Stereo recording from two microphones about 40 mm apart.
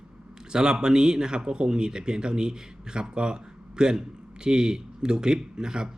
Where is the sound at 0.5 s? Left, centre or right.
Centre.